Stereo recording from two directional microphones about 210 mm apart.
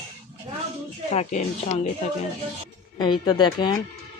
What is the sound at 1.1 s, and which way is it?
Speech, 35° left (ahead or behind).